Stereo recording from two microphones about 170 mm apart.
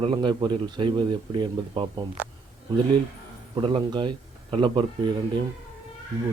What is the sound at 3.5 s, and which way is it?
Speech, 30° right (ahead or behind).